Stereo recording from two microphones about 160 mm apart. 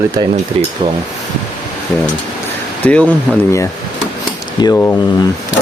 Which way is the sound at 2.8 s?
10° left (ahead or behind).